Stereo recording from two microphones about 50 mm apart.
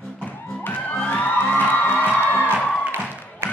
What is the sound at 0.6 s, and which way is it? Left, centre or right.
Music, left.